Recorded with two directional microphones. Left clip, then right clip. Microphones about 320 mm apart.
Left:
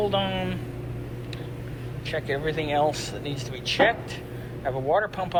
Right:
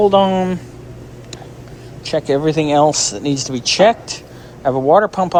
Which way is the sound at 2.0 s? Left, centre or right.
Right.